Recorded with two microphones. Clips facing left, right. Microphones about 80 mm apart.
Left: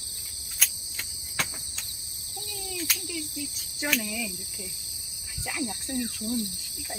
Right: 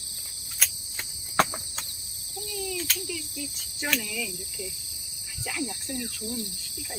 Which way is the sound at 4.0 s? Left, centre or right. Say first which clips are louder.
Left 1 dB; centre.